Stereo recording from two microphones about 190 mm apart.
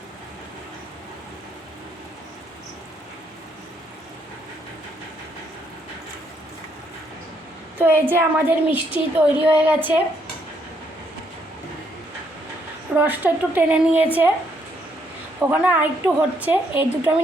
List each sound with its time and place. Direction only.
7.8 s a woman's voice: 10° right (ahead or behind)
13.0 s a woman's voice: 10° right (ahead or behind)
15.4 s a woman's voice: 10° right (ahead or behind)